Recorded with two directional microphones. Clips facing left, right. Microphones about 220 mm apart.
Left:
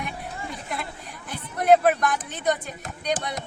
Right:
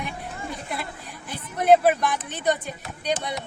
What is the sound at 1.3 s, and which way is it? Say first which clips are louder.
Speech: right 1 dB; centre (ahead or behind).